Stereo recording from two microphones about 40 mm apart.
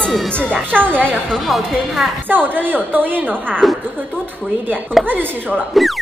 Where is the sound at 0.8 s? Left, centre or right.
Right.